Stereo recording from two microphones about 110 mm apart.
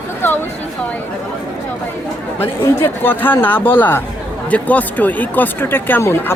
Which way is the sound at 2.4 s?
20° left (ahead or behind).